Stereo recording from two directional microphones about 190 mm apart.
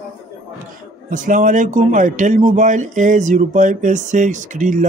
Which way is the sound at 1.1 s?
45° right (ahead or behind).